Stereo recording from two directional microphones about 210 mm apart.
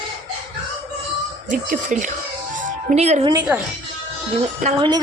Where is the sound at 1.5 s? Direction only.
40° right (ahead or behind).